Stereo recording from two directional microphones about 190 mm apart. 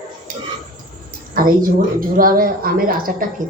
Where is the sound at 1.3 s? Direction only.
50° right (ahead or behind).